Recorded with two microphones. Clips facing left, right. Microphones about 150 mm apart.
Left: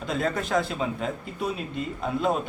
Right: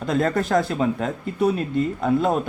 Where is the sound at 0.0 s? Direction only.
50° right (ahead or behind).